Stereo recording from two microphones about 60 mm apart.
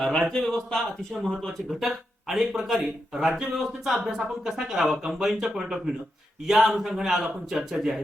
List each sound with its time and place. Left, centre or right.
0.0 s speech: centre